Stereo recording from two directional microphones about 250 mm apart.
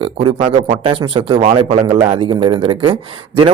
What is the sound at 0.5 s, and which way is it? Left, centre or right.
A man's voice, right.